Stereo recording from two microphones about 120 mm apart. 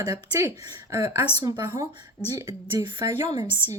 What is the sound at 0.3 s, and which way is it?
A woman's voice, 25° right (ahead or behind).